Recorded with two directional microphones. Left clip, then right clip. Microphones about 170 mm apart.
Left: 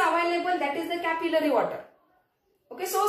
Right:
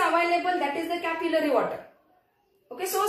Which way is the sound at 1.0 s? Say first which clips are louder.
Left 1 dB; 20° left (ahead or behind).